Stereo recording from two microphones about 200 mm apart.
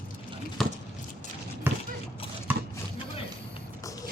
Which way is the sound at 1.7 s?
10° right (ahead or behind).